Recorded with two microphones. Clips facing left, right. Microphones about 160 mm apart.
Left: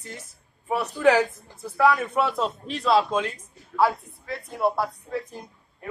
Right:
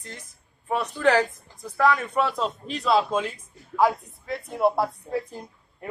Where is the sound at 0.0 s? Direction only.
10° left (ahead or behind); by 3.3 s 5° right (ahead or behind).